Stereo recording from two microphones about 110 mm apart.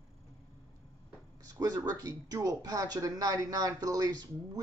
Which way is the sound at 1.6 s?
35° right (ahead or behind).